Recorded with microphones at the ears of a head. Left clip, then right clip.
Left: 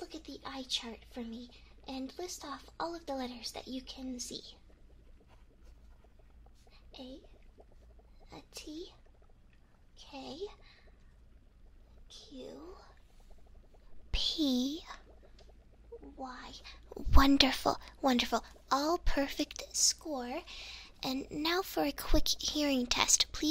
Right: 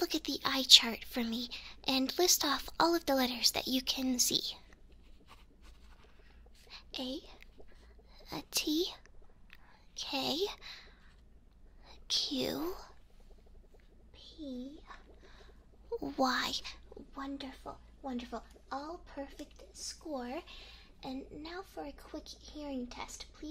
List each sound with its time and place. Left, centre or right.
0.0 s a woman's voice: right
6.7 s a sound: right
8.2 s a child's voice: right
9.5 s a sound: right
11.9 s speech: right
14.1 s a woman's voice: left
15.9 s a woman's voice: right
16.9 s a woman's voice: left